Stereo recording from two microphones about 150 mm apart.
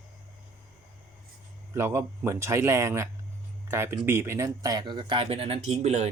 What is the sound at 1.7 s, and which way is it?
Speech, 15° right (ahead or behind).